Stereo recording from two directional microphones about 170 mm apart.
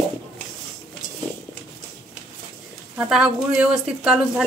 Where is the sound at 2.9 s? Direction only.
5° right (ahead or behind).